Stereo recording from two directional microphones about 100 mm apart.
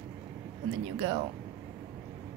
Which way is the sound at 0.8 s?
50° right (ahead or behind).